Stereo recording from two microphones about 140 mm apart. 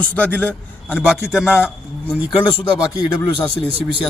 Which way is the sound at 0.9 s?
5° right (ahead or behind).